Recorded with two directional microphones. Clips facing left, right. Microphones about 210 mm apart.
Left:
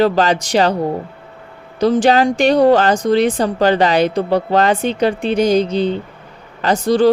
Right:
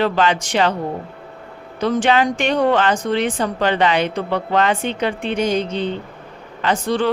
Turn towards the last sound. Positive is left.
turn(degrees=40)  # may be behind; listen again after turning